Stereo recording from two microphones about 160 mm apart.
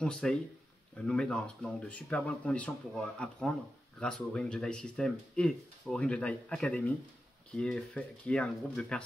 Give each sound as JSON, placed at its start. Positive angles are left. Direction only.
{"t": 0.0, "sound": "speech", "side_deg": 5}